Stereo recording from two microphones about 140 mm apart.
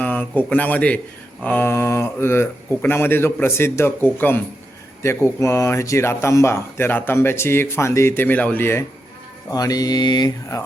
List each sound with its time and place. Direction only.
0.0 s speech: 10° left (ahead or behind)
9.5 s speech: 25° left (ahead or behind)